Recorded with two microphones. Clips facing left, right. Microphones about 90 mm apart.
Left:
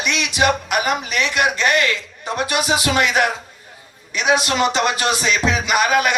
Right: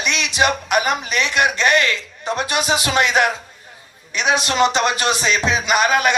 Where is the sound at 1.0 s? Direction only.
20° right (ahead or behind).